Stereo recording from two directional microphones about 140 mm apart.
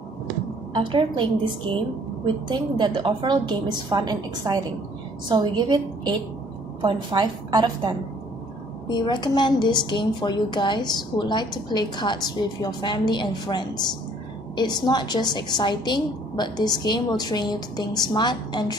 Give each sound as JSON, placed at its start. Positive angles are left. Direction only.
{"t": 0.7, "sound": "a woman's voice", "side_deg": -35}
{"t": 8.8, "sound": "a woman's voice", "side_deg": 35}